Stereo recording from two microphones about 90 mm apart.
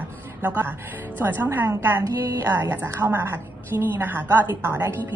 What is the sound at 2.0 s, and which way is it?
A woman's voice, 35° right (ahead or behind).